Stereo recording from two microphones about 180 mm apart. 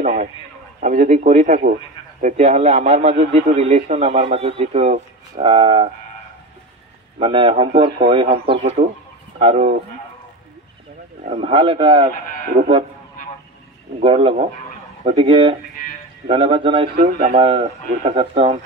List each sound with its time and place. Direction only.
0.0 s a sound: 45° right (ahead or behind)
0.8 s a man's voice: 40° right (ahead or behind)
7.2 s a man's voice: 30° right (ahead or behind)
11.2 s speech: 30° right (ahead or behind)
14.0 s a man's voice: 30° right (ahead or behind)